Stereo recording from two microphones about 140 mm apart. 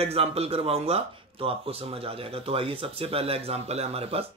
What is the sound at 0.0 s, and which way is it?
Speech, 45° right (ahead or behind).